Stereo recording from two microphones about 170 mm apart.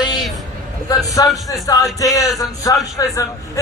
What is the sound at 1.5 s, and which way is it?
A man's voice, 20° left (ahead or behind).